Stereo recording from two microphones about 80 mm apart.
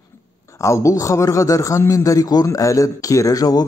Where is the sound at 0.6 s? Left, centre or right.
Left.